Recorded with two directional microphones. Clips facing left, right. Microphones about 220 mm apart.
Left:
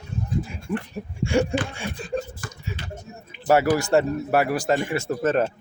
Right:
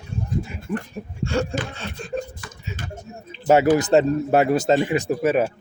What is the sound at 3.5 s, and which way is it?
Speech, 20° right (ahead or behind).